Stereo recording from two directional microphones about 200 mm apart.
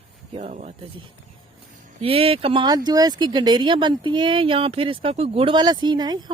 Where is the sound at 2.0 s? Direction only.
30° right (ahead or behind).